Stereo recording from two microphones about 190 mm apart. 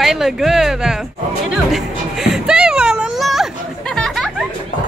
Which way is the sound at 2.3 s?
5° right (ahead or behind).